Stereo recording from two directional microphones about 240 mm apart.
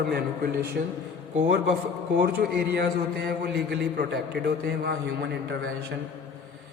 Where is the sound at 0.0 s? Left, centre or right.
Right.